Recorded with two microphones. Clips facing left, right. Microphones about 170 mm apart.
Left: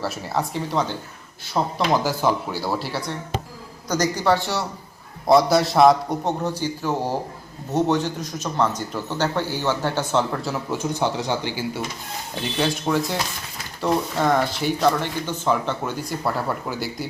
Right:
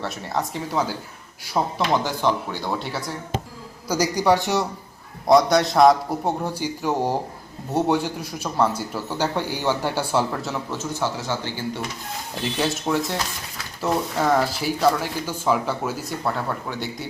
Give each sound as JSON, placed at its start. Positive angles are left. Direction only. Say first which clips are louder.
{"t": 0.0, "sound": "a man's voice", "louder": "left 1 dB", "side_deg": 0}
{"t": 1.9, "sound": "a man's voice", "louder": "left 2 dB", "side_deg": 5}
{"t": 5.2, "sound": "a man's voice", "louder": "even", "side_deg": 5}
{"t": 10.7, "sound": "speech", "louder": "left 5 dB", "side_deg": 15}
{"t": 12.3, "sound": "speech", "louder": "left 1 dB", "side_deg": 0}